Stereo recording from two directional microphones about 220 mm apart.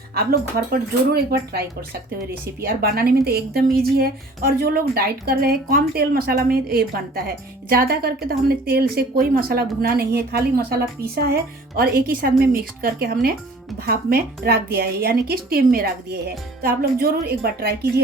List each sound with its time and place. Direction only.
0.1 s a woman's voice: 45° right (ahead or behind)